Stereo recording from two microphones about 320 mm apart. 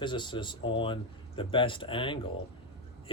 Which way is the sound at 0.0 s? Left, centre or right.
Centre.